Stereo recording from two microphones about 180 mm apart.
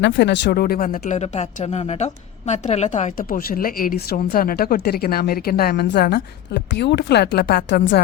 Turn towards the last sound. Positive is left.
turn(degrees=80)